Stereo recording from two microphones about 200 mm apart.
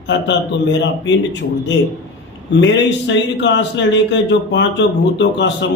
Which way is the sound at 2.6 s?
60° left (ahead or behind).